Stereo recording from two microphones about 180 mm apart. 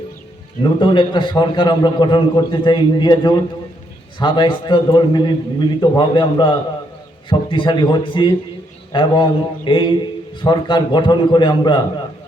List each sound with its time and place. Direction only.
0.8 s a man's voice: 25° left (ahead or behind)